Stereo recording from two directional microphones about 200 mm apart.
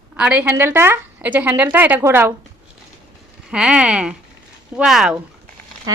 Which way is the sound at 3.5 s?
5° right (ahead or behind).